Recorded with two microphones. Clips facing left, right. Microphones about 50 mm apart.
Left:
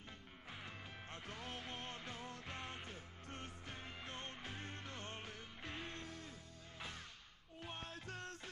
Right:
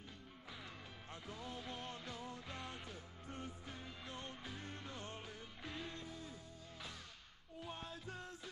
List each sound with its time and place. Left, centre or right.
1.1 s music: left
3.3 s music: left
3.7 s music: left
6.0 s music: left
7.6 s music: left